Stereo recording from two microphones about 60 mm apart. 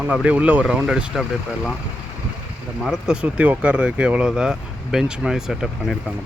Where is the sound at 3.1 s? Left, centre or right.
Centre.